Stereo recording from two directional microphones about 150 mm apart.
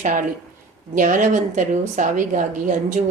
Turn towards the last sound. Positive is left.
turn(degrees=-60)  # may be behind; listen again after turning